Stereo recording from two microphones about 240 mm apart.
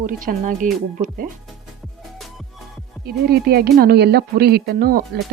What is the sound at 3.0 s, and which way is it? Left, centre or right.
Speech, right.